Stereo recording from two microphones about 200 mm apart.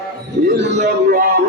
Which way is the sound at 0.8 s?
50° right (ahead or behind).